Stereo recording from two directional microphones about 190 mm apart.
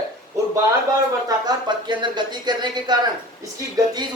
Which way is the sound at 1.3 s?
20° right (ahead or behind).